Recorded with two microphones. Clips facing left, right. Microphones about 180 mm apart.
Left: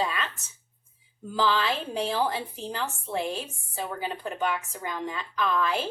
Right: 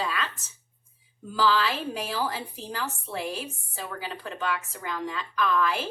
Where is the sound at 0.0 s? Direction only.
20° left (ahead or behind).